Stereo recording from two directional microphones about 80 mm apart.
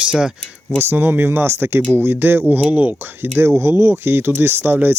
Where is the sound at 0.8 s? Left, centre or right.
Right.